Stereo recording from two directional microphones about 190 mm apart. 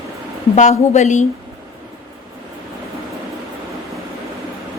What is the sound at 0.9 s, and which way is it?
Speech, 40° left (ahead or behind).